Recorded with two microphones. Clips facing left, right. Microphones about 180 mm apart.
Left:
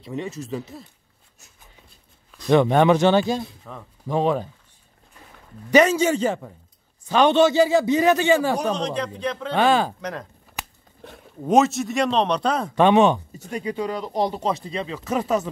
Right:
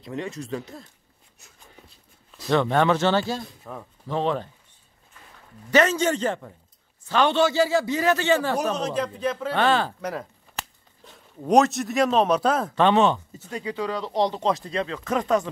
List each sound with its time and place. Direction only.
0.0 s a man's voice: centre (ahead or behind)
2.5 s speech: 15° left (ahead or behind)
3.4 s speech: 5° right (ahead or behind)
4.1 s speech: 10° left (ahead or behind)
5.7 s speech: 10° left (ahead or behind)
8.5 s a man's voice: 5° right (ahead or behind)
9.5 s speech: 10° left (ahead or behind)
11.0 s a sound: 60° left (ahead or behind)
11.4 s a man's voice: centre (ahead or behind)
12.7 s speech: 15° left (ahead or behind)